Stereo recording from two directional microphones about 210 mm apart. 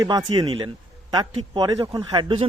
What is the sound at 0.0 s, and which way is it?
A man's voice, 20° right (ahead or behind).